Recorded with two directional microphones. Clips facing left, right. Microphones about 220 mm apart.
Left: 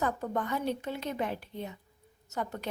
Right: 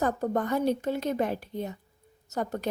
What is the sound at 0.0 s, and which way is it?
A woman's voice, 40° right (ahead or behind).